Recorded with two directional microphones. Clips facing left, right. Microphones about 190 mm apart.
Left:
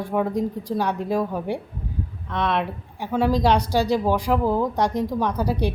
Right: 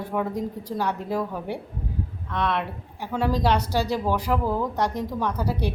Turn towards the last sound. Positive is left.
turn(degrees=15)  # may be behind; listen again after turning